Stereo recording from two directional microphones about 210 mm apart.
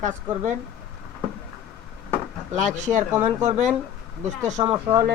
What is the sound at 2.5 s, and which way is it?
Speech, 35° right (ahead or behind).